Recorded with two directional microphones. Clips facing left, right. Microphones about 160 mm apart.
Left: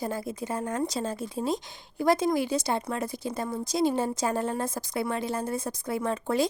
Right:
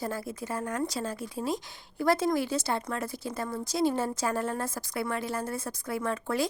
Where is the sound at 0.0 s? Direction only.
20° left (ahead or behind).